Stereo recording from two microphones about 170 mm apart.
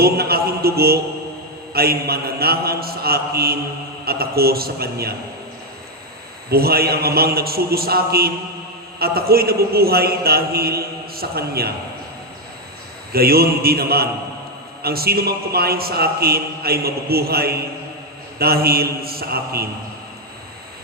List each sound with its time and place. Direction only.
0.0 s a man's voice: 65° right (ahead or behind)
6.5 s a man's voice: 65° right (ahead or behind)
13.1 s a man's voice: 65° right (ahead or behind)